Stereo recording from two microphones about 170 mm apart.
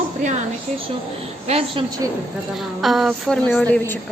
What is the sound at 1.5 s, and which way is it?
Speech, 35° right (ahead or behind).